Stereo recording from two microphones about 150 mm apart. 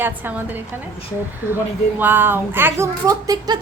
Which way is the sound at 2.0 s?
15° right (ahead or behind).